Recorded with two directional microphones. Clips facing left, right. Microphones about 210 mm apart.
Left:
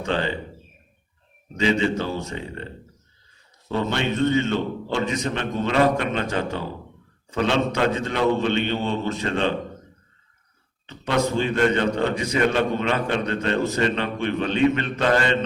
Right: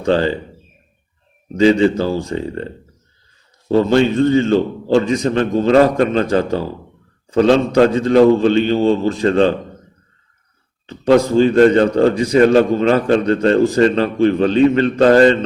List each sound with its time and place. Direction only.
0.0 s a man's voice: 35° right (ahead or behind)
1.5 s a man's voice: 35° right (ahead or behind)
10.8 s a man's voice: 35° right (ahead or behind)